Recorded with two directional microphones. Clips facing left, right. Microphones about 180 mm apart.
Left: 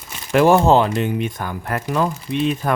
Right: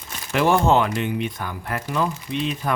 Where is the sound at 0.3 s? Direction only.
45° left (ahead or behind).